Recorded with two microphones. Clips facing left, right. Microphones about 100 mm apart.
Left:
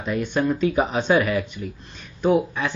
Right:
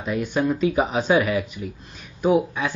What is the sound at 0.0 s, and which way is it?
Speech, centre (ahead or behind).